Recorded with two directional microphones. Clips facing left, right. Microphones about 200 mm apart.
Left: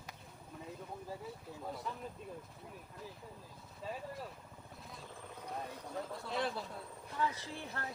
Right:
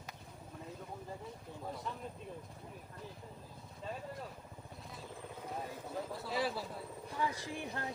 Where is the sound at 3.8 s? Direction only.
5° left (ahead or behind).